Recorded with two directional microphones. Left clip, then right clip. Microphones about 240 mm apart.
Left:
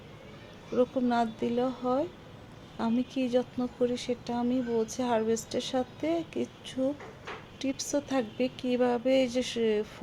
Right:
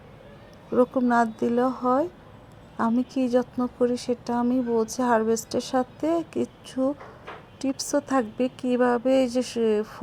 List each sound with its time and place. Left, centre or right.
0.7 s a woman's voice: centre